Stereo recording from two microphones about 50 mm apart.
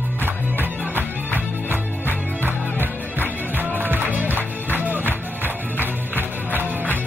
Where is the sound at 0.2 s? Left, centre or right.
Right.